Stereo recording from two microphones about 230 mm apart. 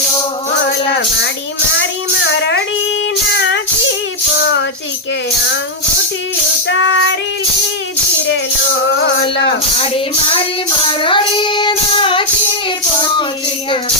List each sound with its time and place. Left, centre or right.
2.2 s a sound: left
3.3 s child singing: left
6.7 s child singing: left
11.0 s child singing: left